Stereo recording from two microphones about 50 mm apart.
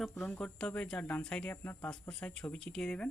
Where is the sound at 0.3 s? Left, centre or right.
Centre.